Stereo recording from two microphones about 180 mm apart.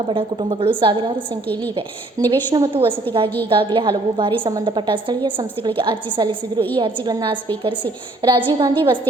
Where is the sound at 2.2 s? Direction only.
20° right (ahead or behind).